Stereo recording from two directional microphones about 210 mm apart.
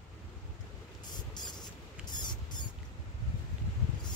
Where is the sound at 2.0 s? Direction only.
20° left (ahead or behind).